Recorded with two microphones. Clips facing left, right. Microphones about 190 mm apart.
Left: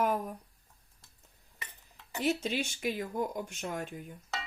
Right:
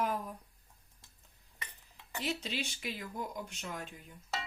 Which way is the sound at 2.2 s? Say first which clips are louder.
Left 7 dB; 50° left (ahead or behind).